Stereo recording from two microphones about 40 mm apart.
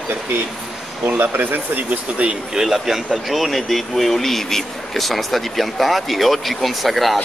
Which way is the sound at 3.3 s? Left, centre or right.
Centre.